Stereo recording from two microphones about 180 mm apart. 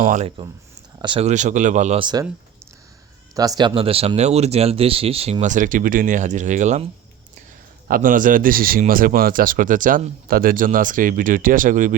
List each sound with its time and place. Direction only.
0.0 s speech: 45° right (ahead or behind)
0.9 s speech: 25° right (ahead or behind)
1.3 s speech: 45° right (ahead or behind)
2.0 s speech: 25° right (ahead or behind)
3.3 s speech: 20° right (ahead or behind); by 6.8 s 40° right (ahead or behind)
7.9 s speech: 50° right (ahead or behind)